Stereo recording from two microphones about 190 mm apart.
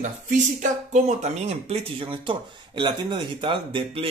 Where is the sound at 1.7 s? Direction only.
30° right (ahead or behind).